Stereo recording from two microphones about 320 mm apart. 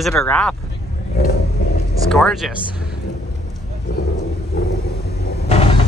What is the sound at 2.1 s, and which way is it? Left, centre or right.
Speech, centre.